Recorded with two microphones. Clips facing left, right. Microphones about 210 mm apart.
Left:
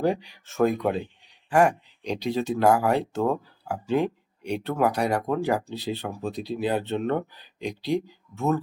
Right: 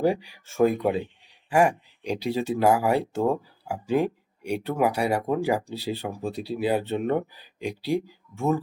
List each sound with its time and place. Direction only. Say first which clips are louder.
0.0 s speech: right 1 dB; 10° right (ahead or behind)